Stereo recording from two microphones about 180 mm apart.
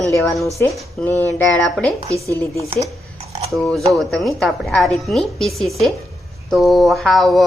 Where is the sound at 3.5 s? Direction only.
Centre (ahead or behind).